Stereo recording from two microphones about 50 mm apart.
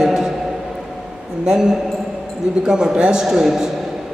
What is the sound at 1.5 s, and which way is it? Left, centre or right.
A man's voice, centre.